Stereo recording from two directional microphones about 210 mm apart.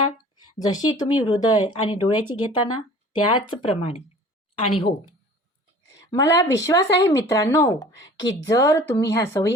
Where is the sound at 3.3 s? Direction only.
25° left (ahead or behind).